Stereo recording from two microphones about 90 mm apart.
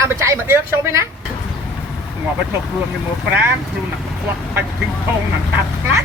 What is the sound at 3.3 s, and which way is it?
Speech, 25° right (ahead or behind).